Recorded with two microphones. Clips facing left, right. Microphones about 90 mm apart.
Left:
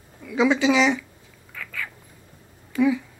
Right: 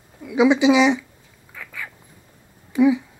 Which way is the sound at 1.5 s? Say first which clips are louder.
Left 1 dB; 15° right (ahead or behind).